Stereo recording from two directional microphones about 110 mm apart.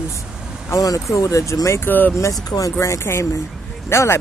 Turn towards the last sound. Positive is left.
turn(degrees=25)  # may be behind; listen again after turning